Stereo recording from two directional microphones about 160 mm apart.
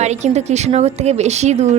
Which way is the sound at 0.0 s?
45° right (ahead or behind).